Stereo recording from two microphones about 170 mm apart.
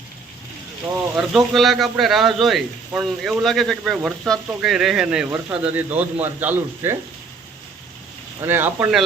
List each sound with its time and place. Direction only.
1.1 s a man's voice: centre (ahead or behind)
8.4 s speech: 10° right (ahead or behind)